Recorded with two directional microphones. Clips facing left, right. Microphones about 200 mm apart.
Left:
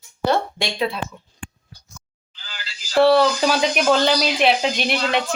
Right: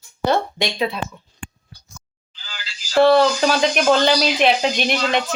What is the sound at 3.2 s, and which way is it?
Speech, 10° left (ahead or behind).